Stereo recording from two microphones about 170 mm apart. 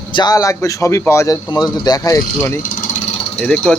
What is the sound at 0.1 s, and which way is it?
Speech, 25° left (ahead or behind).